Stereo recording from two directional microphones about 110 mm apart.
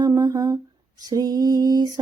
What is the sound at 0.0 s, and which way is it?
Humming, 35° right (ahead or behind).